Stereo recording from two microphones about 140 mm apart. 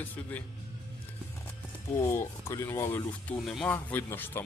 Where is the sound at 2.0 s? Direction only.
20° left (ahead or behind).